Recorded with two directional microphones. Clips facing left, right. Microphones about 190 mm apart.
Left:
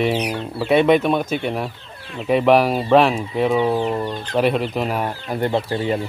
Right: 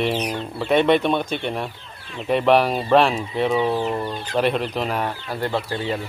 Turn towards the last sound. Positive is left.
turn(degrees=25)  # may be behind; listen again after turning